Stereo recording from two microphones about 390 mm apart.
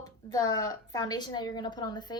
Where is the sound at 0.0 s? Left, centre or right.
Centre.